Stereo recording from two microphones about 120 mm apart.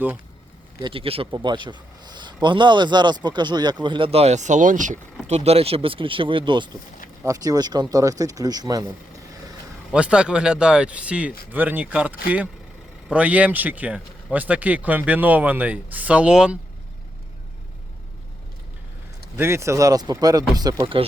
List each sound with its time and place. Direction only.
0.8 s speech: 45° right (ahead or behind); by 4.9 s 90° right
5.3 s speech: 60° right (ahead or behind); by 6.7 s 40° right (ahead or behind)
7.3 s speech: 30° right (ahead or behind)
9.9 s speech: 10° right (ahead or behind)
19.4 s speech: 20° right (ahead or behind)